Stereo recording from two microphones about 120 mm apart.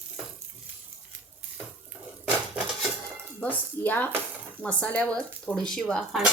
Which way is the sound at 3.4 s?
15° left (ahead or behind).